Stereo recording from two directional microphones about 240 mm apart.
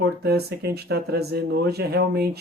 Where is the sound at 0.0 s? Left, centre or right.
Right.